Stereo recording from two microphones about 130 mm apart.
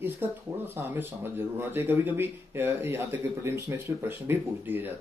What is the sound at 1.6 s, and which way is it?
Speech, 15° right (ahead or behind).